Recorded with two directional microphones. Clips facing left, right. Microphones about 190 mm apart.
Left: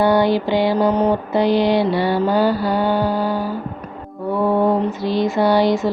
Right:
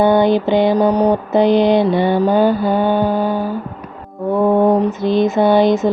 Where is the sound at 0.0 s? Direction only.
20° right (ahead or behind).